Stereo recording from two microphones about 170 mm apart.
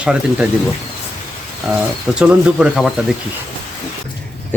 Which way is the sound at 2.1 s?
5° right (ahead or behind).